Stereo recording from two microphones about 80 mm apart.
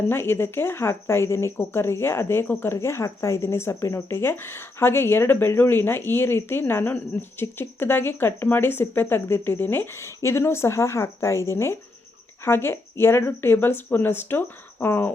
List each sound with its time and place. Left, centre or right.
0.1 s speech: left